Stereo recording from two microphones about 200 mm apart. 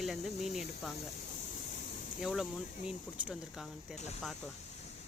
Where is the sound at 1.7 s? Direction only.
40° left (ahead or behind).